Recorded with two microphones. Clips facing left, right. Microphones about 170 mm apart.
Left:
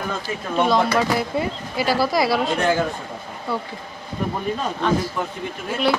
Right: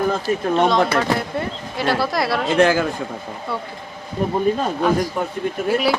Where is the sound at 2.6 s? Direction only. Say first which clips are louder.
Right 9 dB; 90° right.